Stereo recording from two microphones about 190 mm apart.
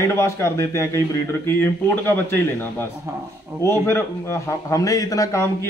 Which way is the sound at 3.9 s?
15° left (ahead or behind).